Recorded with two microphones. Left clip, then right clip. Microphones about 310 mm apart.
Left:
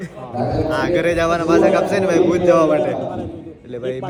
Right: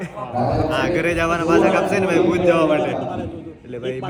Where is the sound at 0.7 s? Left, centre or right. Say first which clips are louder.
Left 2 dB; centre.